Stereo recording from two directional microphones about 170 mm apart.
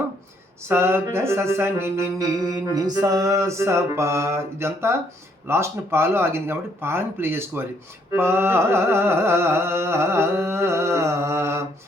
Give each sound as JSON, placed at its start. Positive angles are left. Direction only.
{"t": 0.7, "sound": "music", "side_deg": -15}